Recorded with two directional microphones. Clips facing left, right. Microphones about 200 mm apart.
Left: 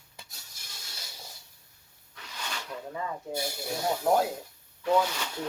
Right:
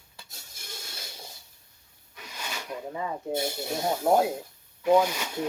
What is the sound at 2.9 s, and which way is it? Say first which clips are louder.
Speech: right 4 dB; 25° right (ahead or behind).